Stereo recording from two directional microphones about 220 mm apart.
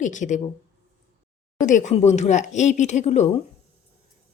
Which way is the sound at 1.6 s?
35° left (ahead or behind).